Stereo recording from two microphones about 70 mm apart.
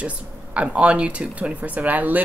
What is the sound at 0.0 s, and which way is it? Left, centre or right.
Speech, centre.